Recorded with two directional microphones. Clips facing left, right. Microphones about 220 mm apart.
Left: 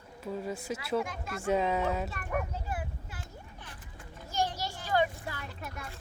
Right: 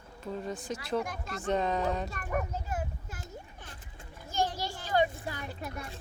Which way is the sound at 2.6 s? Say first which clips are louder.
Right 2 dB; 40° right (ahead or behind).